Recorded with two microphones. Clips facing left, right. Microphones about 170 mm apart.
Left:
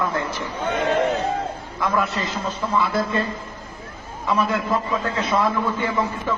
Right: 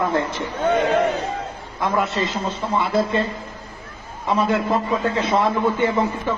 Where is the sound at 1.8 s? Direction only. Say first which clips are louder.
Right 2 dB; 25° right (ahead or behind).